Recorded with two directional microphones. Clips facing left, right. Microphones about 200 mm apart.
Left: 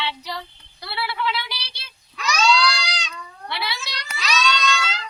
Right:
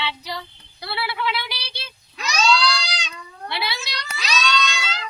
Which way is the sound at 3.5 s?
15° right (ahead or behind).